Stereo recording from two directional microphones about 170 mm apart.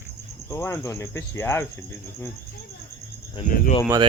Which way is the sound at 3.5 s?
55° left (ahead or behind).